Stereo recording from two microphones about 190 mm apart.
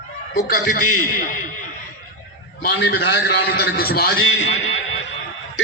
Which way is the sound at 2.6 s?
65° left (ahead or behind).